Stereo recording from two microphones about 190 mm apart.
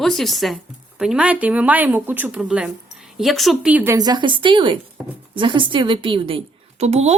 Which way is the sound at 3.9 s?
20° right (ahead or behind).